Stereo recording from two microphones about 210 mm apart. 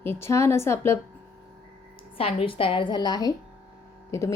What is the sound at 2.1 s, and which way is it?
A woman's voice, 25° left (ahead or behind).